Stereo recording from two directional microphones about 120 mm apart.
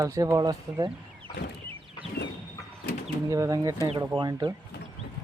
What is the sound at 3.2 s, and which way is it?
Speech, 30° right (ahead or behind).